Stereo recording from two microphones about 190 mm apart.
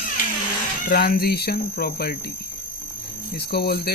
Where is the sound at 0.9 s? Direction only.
50° left (ahead or behind).